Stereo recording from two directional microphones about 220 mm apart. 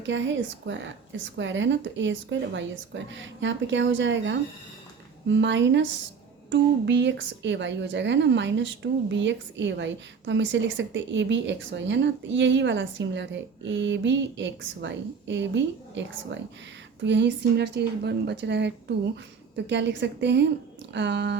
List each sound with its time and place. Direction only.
0.0 s a woman's voice: 55° right (ahead or behind)